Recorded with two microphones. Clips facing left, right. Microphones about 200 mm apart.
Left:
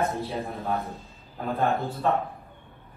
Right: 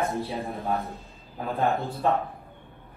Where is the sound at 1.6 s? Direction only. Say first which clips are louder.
Right 1 dB; 15° right (ahead or behind).